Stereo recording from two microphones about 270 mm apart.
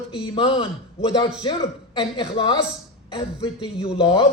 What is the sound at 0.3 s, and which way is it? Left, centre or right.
Speech, centre.